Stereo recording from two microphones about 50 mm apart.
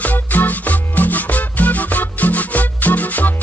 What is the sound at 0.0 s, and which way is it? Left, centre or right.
Music, left.